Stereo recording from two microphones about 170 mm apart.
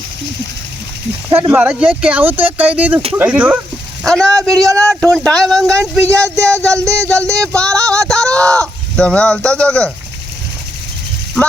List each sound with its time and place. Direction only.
1.4 s speech: 10° right (ahead or behind)
4.0 s speech: 5° left (ahead or behind)
6.2 s speech: 20° right (ahead or behind)
7.4 s speech: 5° left (ahead or behind)